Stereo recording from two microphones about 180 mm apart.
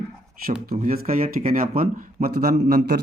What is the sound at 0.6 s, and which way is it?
Speech, 55° right (ahead or behind).